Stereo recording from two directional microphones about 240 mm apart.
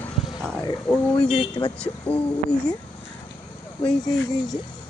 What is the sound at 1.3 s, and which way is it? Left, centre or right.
Speech, left.